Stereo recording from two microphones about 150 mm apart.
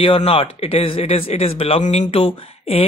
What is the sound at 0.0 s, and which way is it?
Speech, 40° left (ahead or behind).